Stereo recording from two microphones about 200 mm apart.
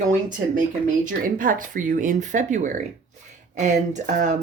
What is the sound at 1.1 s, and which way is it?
Speech, 45° right (ahead or behind).